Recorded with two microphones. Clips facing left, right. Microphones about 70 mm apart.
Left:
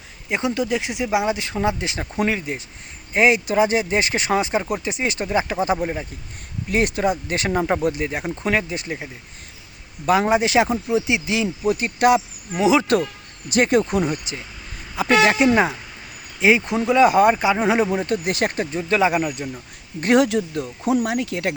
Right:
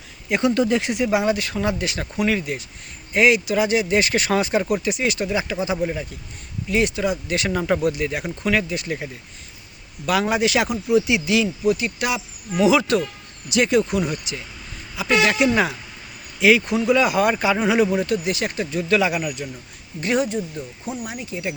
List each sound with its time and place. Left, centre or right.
0.3 s speech: left
0.5 s speech: centre; by 6.1 s left
6.7 s speech: left
10.1 s speech: left
11.6 s speech: left
12.5 s speech: left
13.5 s speech: left
17.3 s speech: centre
18.0 s speech: left
20.1 s speech: left